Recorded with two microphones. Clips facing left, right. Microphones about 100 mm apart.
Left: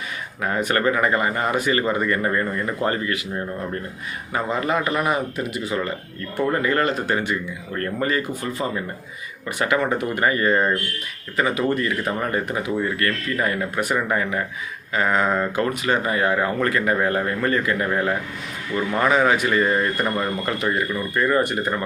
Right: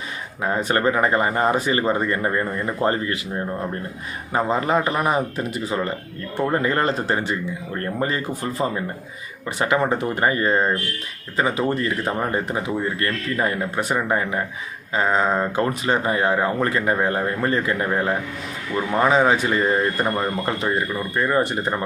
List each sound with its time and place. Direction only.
0.4 s speech: 25° right (ahead or behind)
4.3 s speech: 30° right (ahead or behind)
9.6 s speech: 25° right (ahead or behind)